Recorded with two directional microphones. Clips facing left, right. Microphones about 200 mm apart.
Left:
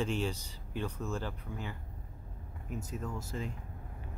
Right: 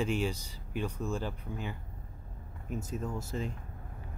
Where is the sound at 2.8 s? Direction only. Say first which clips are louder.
Right 3 dB; 25° right (ahead or behind).